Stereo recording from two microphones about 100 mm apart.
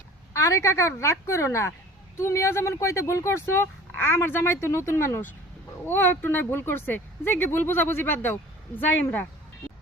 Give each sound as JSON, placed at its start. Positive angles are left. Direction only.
{"t": 0.3, "sound": "speech", "side_deg": 30}